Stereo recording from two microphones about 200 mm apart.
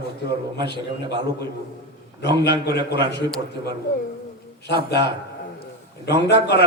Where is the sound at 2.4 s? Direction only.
55° left (ahead or behind).